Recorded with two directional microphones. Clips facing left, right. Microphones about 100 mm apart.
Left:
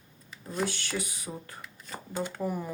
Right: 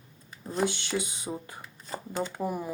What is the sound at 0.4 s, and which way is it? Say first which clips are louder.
Speech: right 3 dB; 20° right (ahead or behind).